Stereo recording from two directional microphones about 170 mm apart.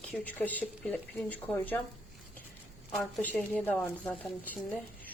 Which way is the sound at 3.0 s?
5° left (ahead or behind).